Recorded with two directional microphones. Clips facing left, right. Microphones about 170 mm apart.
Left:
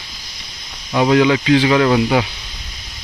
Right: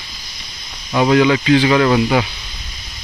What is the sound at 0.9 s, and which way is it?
Speech, 10° left (ahead or behind).